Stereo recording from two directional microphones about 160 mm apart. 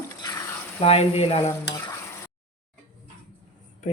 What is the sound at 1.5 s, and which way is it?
Speech, 20° left (ahead or behind).